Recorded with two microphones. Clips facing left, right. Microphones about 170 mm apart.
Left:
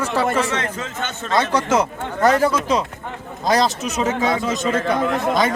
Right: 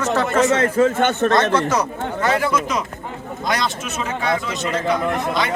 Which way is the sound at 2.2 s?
40° left (ahead or behind).